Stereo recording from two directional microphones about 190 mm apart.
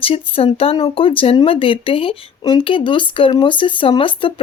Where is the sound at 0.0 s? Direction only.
30° left (ahead or behind).